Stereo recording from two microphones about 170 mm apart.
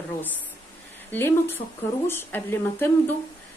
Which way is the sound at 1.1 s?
15° left (ahead or behind).